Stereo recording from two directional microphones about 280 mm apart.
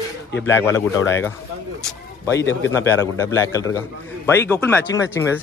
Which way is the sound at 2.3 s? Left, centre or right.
Left.